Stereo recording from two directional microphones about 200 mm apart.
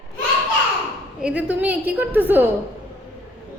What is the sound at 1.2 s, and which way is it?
A woman's voice, 5° right (ahead or behind).